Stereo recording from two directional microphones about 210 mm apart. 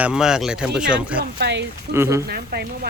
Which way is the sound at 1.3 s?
55° right (ahead or behind).